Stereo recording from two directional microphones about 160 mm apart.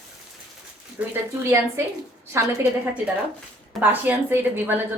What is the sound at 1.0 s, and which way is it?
Speech, 10° right (ahead or behind).